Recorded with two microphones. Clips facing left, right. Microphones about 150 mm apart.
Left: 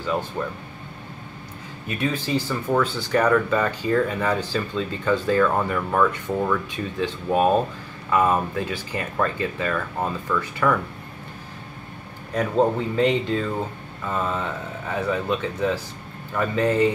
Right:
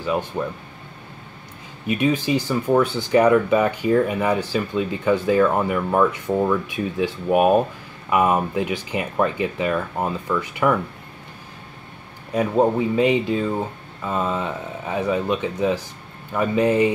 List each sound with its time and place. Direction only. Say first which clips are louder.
0.0 s speech: right 2 dB; 15° right (ahead or behind)
1.9 s speech: right 5 dB; 15° right (ahead or behind)
12.4 s speech: right 2 dB; 15° right (ahead or behind)